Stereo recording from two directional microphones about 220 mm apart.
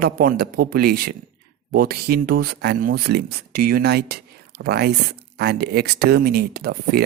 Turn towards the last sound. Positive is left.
turn(degrees=-45)  # may be behind; listen again after turning